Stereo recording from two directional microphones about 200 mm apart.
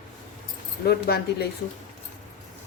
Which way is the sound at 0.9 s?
50° left (ahead or behind).